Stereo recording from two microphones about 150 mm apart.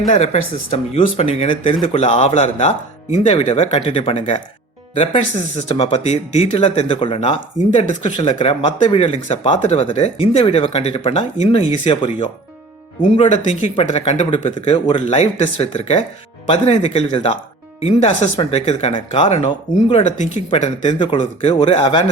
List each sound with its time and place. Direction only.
0.9 s speech: 40° left (ahead or behind)
13.0 s speech: 50° left (ahead or behind)
21.6 s speech: 40° left (ahead or behind)